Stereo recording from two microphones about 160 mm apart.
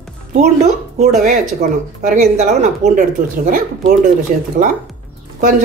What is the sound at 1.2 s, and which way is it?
Speech, 50° right (ahead or behind).